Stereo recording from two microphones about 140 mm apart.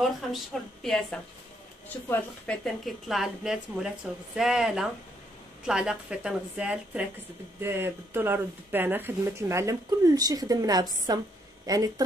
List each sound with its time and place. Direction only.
0.0 s a woman's voice: centre (ahead or behind); by 11.9 s 25° right (ahead or behind)